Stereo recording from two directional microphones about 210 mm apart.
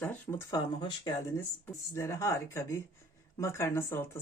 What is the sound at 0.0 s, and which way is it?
Speech, 10° left (ahead or behind).